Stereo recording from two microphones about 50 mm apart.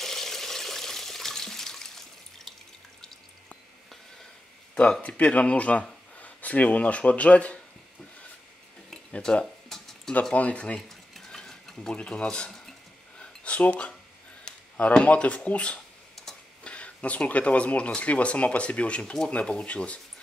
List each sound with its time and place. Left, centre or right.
0.0 s water: centre
5.0 s speech: left
9.2 s a sound: centre
10.3 s speech: left
10.9 s stir: centre
11.9 s speech: left
12.4 s a sound: centre
13.2 s a sound: left
14.4 s speech: left
16.2 s tick-tock: centre
16.6 s speech: left